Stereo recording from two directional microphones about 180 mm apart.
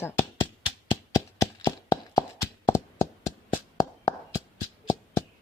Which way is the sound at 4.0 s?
15° left (ahead or behind).